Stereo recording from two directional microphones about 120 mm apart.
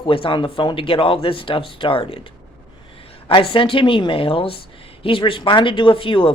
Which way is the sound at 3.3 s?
45° left (ahead or behind).